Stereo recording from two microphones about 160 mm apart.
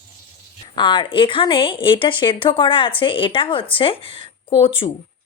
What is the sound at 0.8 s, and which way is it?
A woman's voice, 30° left (ahead or behind).